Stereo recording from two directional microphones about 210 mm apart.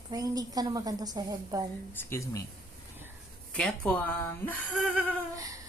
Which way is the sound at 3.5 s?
5° left (ahead or behind).